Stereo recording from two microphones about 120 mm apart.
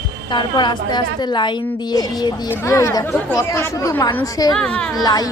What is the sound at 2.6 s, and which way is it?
Speech, 25° left (ahead or behind).